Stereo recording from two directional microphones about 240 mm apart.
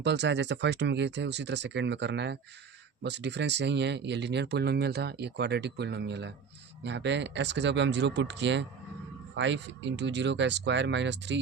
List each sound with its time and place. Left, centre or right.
0.0 s speech: right